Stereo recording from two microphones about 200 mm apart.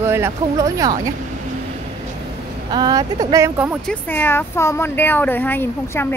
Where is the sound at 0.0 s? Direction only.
10° right (ahead or behind).